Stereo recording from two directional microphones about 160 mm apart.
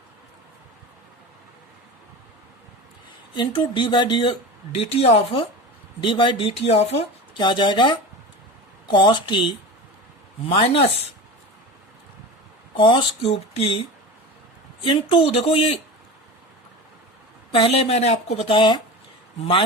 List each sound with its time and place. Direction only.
3.3 s speech: 30° left (ahead or behind)
12.7 s speech: 30° left (ahead or behind)
14.8 s speech: 35° left (ahead or behind)
17.5 s speech: 35° left (ahead or behind)